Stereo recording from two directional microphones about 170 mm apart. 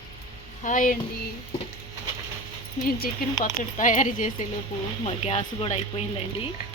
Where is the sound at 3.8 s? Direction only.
50° left (ahead or behind).